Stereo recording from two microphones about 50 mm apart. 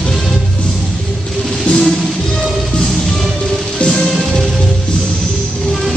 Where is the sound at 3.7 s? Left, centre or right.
Left.